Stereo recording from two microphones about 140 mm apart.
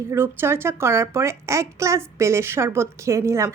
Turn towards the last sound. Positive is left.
turn(degrees=-20)  # may be behind; listen again after turning